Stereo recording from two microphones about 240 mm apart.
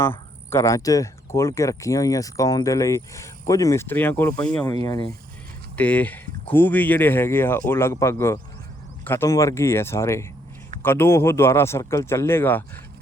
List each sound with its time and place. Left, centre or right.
0.0 s speech: centre